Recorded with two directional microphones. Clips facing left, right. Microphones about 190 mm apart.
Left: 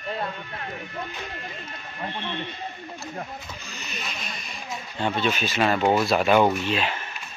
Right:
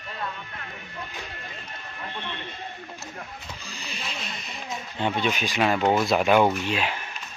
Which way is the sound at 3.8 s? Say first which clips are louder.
Even; 30° right (ahead or behind).